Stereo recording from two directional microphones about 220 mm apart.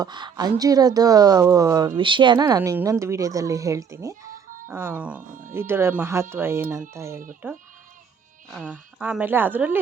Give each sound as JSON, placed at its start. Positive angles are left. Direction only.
{"t": 0.0, "sound": "a woman's voice", "side_deg": -20}
{"t": 5.3, "sound": "speech", "side_deg": -35}
{"t": 5.5, "sound": "speech", "side_deg": -10}